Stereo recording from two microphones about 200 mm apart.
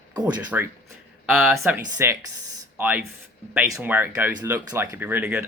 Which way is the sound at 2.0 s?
10° right (ahead or behind).